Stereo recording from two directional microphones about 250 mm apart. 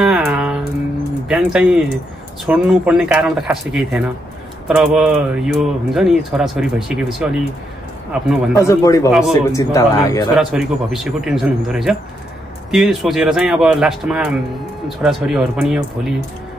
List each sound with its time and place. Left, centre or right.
0.0 s music: centre
1.3 s speech: centre
8.6 s speech: centre
10.3 s speech: centre